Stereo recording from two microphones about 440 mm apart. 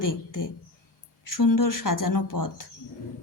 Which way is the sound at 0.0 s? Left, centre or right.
Left.